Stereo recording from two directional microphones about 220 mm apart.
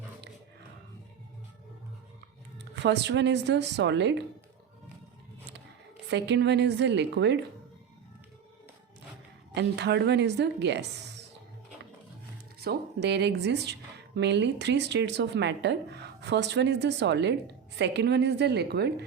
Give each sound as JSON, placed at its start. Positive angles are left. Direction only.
{"t": 2.7, "sound": "speech", "side_deg": -55}
{"t": 6.1, "sound": "speech", "side_deg": -50}
{"t": 9.6, "sound": "speech", "side_deg": -50}
{"t": 12.5, "sound": "speech", "side_deg": -50}